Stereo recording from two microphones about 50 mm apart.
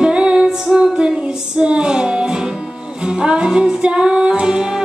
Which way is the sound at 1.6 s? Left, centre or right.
Centre.